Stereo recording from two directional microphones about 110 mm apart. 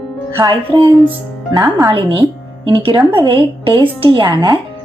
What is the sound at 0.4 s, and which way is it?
Speech, 40° right (ahead or behind).